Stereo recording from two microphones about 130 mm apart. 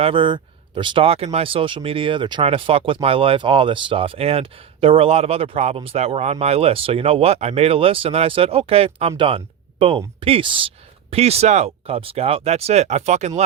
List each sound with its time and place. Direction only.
0.0 s speech: 40° right (ahead or behind); by 13.4 s 60° right (ahead or behind)